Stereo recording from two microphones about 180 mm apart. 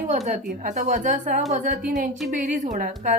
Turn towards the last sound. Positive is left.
turn(degrees=-45)  # may be behind; listen again after turning